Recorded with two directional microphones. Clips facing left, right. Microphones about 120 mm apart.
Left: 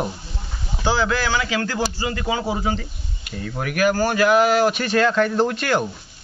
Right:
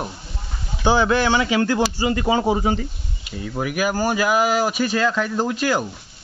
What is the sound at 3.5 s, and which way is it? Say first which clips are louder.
Speech: left 2 dB; 10° right (ahead or behind).